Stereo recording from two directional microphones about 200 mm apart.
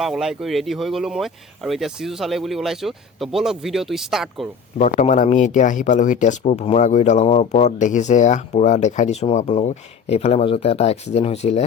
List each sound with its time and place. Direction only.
0.0 s speech: centre (ahead or behind)
4.8 s speech: 35° left (ahead or behind)